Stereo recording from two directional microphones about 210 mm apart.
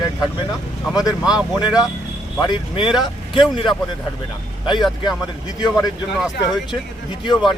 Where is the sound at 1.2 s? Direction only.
5° right (ahead or behind).